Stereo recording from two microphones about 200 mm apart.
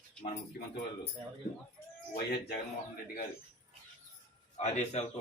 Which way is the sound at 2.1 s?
50° left (ahead or behind).